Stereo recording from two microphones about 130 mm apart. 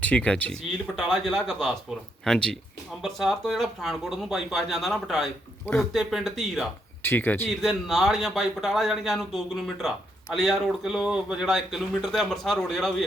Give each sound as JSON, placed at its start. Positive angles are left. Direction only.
{"t": 0.0, "sound": "speech", "side_deg": 10}
{"t": 5.6, "sound": "speech", "side_deg": 15}
{"t": 5.9, "sound": "speech", "side_deg": 0}
{"t": 7.0, "sound": "speech", "side_deg": 15}
{"t": 7.4, "sound": "speech", "side_deg": 0}